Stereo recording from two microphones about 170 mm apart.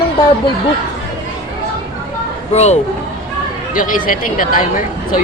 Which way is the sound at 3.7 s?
50° left (ahead or behind).